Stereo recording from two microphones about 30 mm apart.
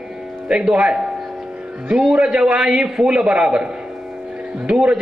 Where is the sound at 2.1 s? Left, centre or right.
Right.